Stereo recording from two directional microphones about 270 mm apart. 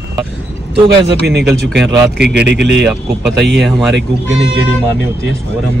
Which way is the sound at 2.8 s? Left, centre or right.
Centre.